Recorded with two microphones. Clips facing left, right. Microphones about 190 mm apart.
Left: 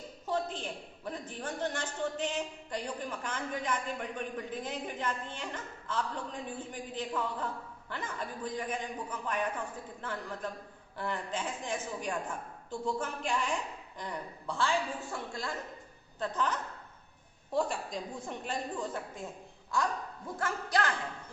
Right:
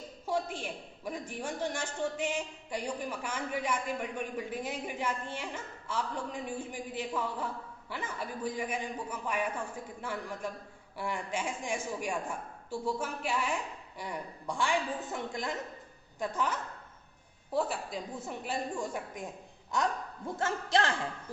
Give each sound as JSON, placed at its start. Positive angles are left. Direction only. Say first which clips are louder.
{"t": 0.3, "sound": "a woman's voice", "louder": "even", "side_deg": -10}